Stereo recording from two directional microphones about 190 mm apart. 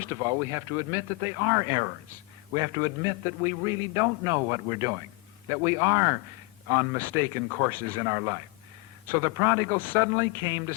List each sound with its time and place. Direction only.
0.0 s a man's voice: 15° right (ahead or behind)